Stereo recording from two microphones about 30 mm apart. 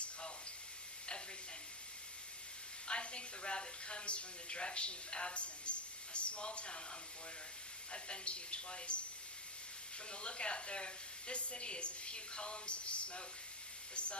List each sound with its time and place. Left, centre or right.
2.8 s a woman's voice: left
7.9 s a woman's voice: left
10.1 s a woman's voice: left